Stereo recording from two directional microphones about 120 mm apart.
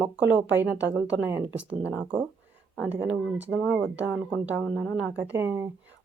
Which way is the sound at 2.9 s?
15° right (ahead or behind).